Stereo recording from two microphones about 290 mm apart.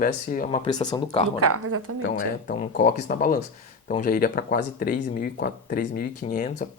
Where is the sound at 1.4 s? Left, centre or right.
Right.